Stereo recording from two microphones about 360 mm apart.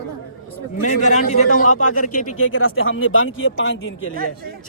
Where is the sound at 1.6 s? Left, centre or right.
Left.